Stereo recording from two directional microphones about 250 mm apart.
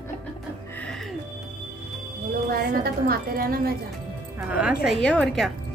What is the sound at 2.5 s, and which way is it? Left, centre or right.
A woman's voice, right.